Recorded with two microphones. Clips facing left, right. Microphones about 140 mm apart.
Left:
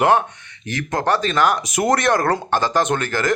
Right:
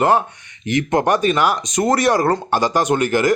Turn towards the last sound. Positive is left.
turn(degrees=-15)  # may be behind; listen again after turning